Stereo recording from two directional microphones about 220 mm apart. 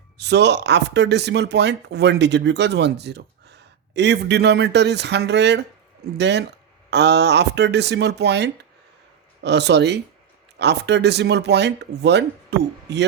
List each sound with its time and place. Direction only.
0.2 s speech: 50° right (ahead or behind)